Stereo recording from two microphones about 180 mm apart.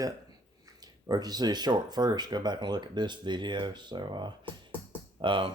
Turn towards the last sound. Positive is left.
turn(degrees=-30)  # may be behind; listen again after turning